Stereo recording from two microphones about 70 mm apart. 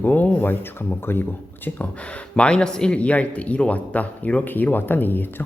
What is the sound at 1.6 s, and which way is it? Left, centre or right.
Speech, centre.